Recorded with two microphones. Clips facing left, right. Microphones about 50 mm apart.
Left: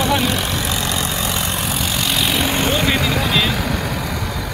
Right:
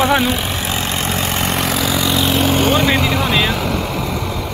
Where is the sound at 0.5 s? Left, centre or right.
Right.